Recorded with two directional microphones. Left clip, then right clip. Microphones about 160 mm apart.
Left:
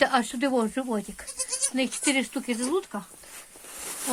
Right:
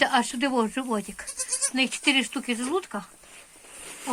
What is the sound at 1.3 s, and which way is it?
Goat, 30° right (ahead or behind).